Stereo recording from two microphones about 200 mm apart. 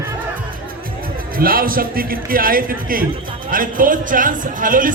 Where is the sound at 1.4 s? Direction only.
45° right (ahead or behind).